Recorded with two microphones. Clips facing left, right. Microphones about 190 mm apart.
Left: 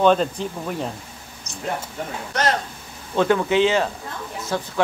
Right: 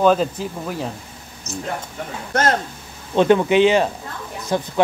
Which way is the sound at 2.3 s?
50° right (ahead or behind).